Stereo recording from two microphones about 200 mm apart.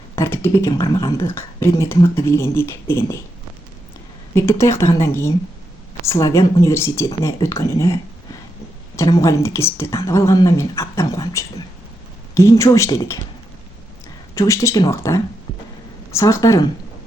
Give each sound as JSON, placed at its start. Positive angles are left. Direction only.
{"t": 0.2, "sound": "speech", "side_deg": 15}
{"t": 4.4, "sound": "speech", "side_deg": 15}
{"t": 9.0, "sound": "speech", "side_deg": 15}
{"t": 14.3, "sound": "speech", "side_deg": 15}